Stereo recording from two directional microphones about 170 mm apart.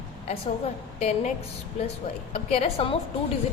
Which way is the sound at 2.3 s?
35° left (ahead or behind).